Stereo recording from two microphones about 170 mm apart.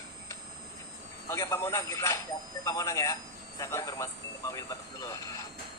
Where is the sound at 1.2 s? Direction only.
15° left (ahead or behind).